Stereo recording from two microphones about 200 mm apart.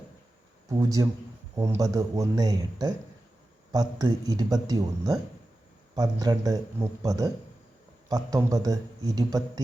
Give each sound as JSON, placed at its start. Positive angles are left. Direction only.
{"t": 0.8, "sound": "a man's voice", "side_deg": -15}